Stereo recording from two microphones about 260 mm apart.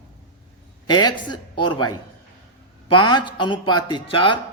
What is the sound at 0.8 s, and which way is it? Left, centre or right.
Speech, centre.